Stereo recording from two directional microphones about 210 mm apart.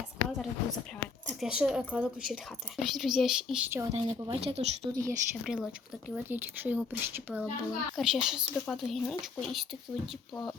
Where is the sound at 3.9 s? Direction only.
30° right (ahead or behind).